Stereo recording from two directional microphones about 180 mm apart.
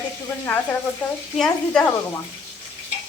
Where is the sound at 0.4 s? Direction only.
10° left (ahead or behind).